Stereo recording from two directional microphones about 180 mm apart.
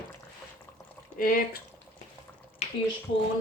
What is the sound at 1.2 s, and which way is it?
Speech, 50° left (ahead or behind).